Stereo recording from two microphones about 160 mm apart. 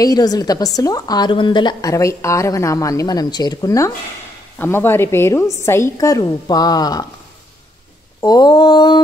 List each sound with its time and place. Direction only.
0.0 s a woman's voice: 25° left (ahead or behind)
8.2 s a woman's voice: 25° left (ahead or behind)